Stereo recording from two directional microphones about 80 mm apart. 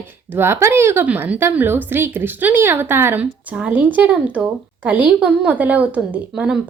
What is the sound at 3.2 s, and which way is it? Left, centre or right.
A woman's voice, centre.